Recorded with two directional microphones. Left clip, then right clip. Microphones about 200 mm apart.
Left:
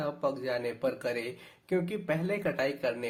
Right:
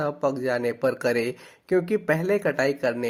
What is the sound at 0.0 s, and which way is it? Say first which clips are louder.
Speech: right 7 dB; 35° right (ahead or behind).